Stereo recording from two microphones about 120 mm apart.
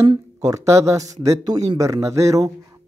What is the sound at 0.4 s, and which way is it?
Speech, 25° right (ahead or behind).